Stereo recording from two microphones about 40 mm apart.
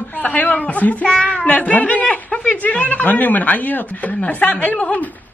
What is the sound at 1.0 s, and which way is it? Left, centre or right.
Speech, left.